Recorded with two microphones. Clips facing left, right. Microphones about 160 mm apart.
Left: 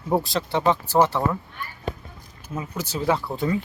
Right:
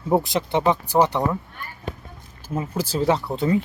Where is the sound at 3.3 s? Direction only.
20° right (ahead or behind).